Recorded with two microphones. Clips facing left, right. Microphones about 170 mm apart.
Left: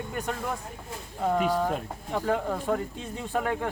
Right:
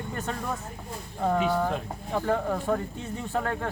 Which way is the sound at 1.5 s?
15° left (ahead or behind).